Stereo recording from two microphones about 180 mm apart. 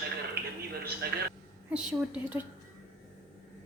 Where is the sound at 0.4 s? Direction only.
60° right (ahead or behind).